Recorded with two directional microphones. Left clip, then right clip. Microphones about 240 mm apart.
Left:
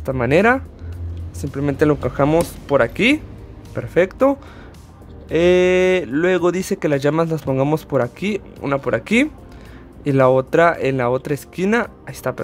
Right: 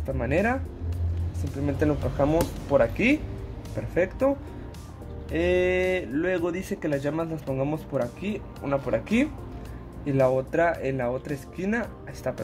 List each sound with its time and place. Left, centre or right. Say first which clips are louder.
0.0 s speech: left 10 dB; left
1.6 s speech: left 9 dB; left